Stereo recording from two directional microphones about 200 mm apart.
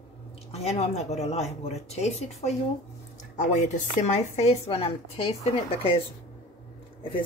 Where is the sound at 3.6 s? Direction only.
35° left (ahead or behind).